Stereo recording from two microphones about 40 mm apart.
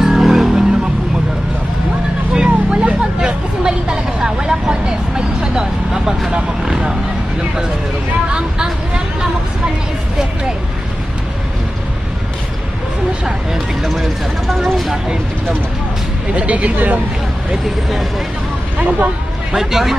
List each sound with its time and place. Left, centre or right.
0.0 s vehicle: centre
2.3 s vehicle: right
3.2 s vehicle: centre
13.8 s vehicle: centre
16.3 s vehicle: right
18.8 s vehicle: right
19.5 s speech: centre